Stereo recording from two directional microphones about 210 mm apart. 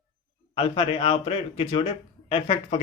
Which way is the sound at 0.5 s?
25° left (ahead or behind).